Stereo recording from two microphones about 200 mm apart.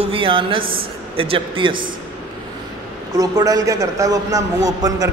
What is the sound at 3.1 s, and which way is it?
A man's voice, 20° right (ahead or behind).